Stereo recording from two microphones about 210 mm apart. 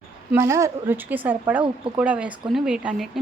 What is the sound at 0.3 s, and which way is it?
A woman's voice, 15° right (ahead or behind).